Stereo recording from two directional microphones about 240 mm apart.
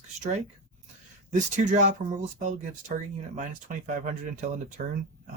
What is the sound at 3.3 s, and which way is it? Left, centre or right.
Speech, right.